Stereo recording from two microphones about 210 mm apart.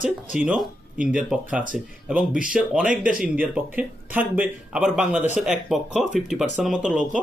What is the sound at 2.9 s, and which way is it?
Speech, 40° right (ahead or behind).